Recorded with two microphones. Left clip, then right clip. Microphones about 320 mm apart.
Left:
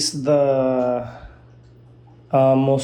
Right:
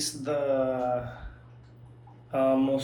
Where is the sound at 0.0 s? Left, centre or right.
Centre.